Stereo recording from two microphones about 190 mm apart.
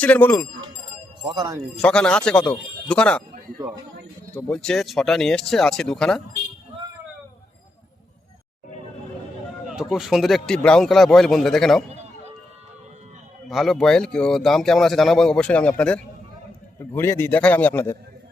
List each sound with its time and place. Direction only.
0.0 s a man's voice: 10° left (ahead or behind)
1.2 s speech: 25° right (ahead or behind)
1.8 s speech: 5° left (ahead or behind)
4.4 s speech: 5° left (ahead or behind)
9.9 s speech: centre (ahead or behind)
13.5 s a man's voice: centre (ahead or behind)